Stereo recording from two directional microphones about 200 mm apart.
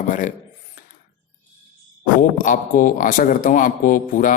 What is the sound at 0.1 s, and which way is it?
Speech, 40° left (ahead or behind).